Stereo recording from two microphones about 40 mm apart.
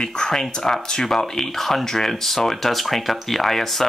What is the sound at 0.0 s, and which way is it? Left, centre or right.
Speech, centre.